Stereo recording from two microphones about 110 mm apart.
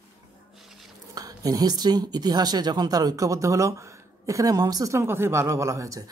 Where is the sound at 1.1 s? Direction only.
35° right (ahead or behind).